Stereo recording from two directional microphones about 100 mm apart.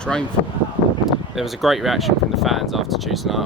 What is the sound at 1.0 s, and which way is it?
Speech, centre (ahead or behind).